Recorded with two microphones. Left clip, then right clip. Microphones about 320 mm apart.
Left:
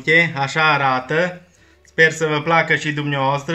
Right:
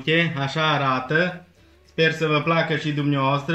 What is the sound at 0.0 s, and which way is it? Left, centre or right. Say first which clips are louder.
Speech: left 6 dB; left.